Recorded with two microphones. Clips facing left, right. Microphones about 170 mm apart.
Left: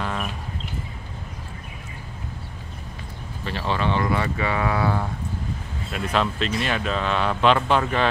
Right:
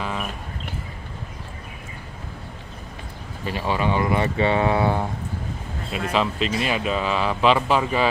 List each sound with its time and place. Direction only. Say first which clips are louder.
0.0 s a sound: even; centre (ahead or behind)
3.4 s speech: right 2 dB; 10° right (ahead or behind)
6.1 s speech: right 1 dB; 5° right (ahead or behind)